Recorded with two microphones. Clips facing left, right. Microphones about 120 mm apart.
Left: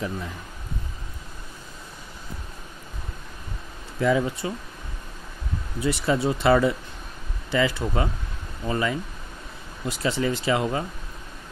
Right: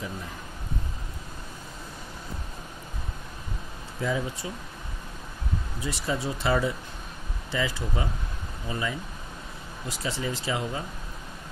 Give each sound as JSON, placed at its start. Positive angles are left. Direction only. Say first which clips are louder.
{"t": 4.0, "sound": "speech", "louder": "left 7 dB", "side_deg": 70}
{"t": 5.8, "sound": "speech", "louder": "left 8 dB", "side_deg": 65}